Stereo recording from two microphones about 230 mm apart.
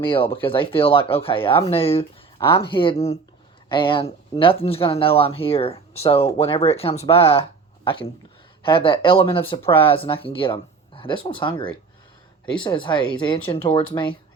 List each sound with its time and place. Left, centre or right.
0.0 s speech: left
8.6 s speech: left